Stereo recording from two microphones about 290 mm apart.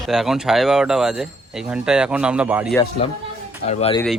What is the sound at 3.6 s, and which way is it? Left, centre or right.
Speech, left.